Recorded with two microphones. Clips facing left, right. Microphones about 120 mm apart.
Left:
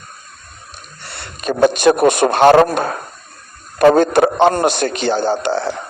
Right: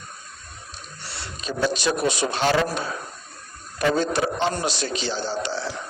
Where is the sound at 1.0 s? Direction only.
55° left (ahead or behind).